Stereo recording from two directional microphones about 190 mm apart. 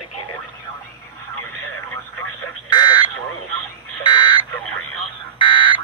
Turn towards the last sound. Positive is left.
turn(degrees=25)  # may be behind; listen again after turning